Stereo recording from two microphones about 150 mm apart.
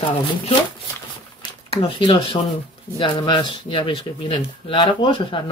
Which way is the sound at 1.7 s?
35° left (ahead or behind).